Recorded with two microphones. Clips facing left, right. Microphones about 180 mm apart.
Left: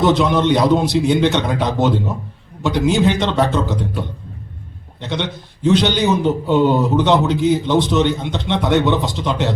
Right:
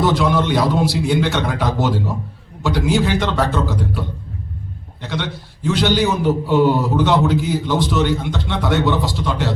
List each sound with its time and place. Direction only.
0.0 s a man's voice: 20° left (ahead or behind)
4.9 s a man's voice: 20° left (ahead or behind)